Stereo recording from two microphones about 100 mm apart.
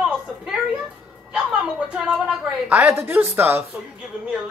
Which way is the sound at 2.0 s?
10° right (ahead or behind).